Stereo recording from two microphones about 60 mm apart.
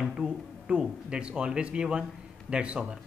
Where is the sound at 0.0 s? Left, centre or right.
Centre.